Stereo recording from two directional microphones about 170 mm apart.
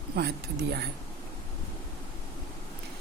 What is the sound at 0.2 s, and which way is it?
Speech, 70° right (ahead or behind).